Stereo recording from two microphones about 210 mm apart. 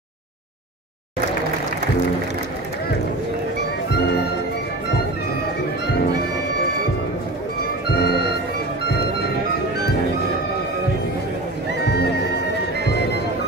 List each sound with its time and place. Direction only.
8.0 s music: 50° left (ahead or behind)
11.8 s music: 50° left (ahead or behind)